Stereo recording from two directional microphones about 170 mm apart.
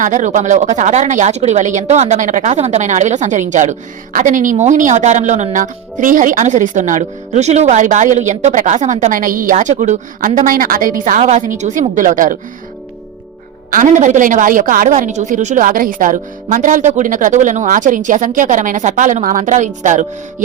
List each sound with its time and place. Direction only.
0.0 s a woman's voice: 45° right (ahead or behind)
13.7 s a woman's voice: 50° right (ahead or behind)